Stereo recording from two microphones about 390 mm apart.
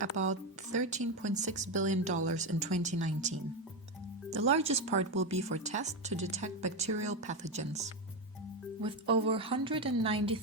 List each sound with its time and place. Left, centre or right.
0.1 s speech: right
0.7 s speech: centre
8.8 s speech: centre